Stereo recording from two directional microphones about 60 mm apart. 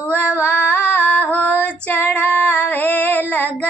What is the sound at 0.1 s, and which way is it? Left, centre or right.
Female singing, left.